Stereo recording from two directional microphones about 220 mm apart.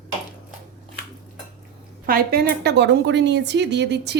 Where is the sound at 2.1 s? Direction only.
45° right (ahead or behind).